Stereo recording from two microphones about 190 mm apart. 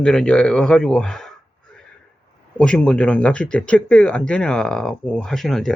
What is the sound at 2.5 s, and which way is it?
Speech, 5° left (ahead or behind).